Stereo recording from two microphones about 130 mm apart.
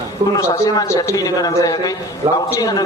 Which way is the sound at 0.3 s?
25° left (ahead or behind).